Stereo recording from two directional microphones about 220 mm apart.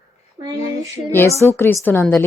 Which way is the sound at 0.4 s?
25° right (ahead or behind).